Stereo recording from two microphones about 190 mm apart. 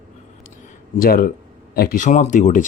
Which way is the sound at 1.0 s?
50° left (ahead or behind).